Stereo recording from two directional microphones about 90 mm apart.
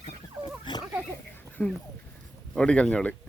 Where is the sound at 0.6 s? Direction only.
55° left (ahead or behind).